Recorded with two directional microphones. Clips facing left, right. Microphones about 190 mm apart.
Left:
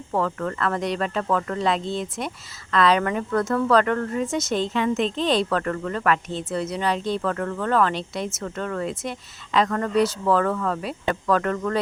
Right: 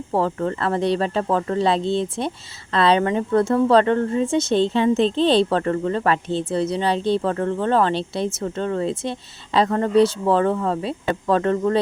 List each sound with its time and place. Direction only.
0.1 s a woman's voice: 30° right (ahead or behind)